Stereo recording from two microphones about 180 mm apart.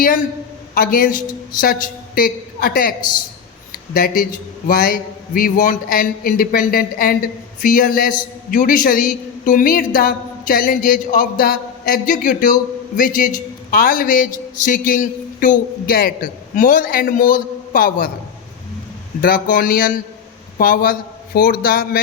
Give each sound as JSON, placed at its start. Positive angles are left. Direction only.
{"t": 0.7, "sound": "a man's voice", "side_deg": 55}
{"t": 3.7, "sound": "a sound", "side_deg": 55}
{"t": 4.7, "sound": "a man's voice", "side_deg": 55}
{"t": 19.2, "sound": "a man's voice", "side_deg": 50}